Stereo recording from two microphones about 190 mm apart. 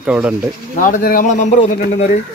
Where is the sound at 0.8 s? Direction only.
45° left (ahead or behind).